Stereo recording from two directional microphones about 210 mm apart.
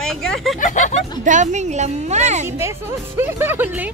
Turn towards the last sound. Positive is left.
turn(degrees=-10)  # may be behind; listen again after turning